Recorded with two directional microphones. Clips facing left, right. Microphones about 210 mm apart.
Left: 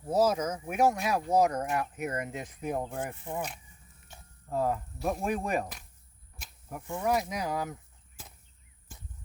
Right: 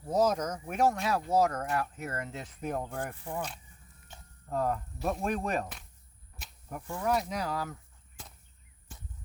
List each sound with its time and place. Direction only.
0.0 s speech: 5° left (ahead or behind)
6.4 s cricket: centre (ahead or behind)
7.0 s speech: 10° left (ahead or behind)